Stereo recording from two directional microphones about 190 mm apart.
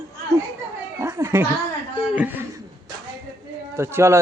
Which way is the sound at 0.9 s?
15° right (ahead or behind).